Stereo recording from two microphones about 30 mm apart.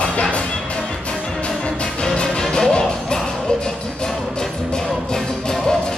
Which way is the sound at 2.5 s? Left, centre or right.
Left.